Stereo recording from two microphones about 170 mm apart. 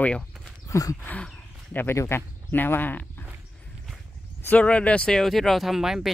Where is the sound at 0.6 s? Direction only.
20° left (ahead or behind).